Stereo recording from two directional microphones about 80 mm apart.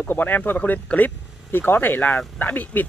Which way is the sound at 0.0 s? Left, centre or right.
Left.